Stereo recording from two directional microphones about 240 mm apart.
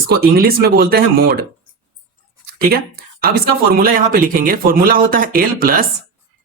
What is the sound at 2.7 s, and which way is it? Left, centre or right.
Speech, right.